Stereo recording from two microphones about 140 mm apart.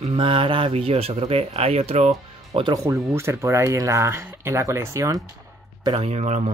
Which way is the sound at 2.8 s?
20° right (ahead or behind).